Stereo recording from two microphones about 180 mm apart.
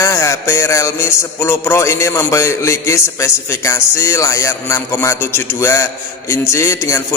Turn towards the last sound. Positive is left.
turn(degrees=15)  # may be behind; listen again after turning